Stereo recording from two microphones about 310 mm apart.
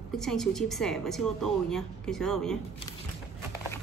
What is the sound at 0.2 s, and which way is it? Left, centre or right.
A woman's voice, centre.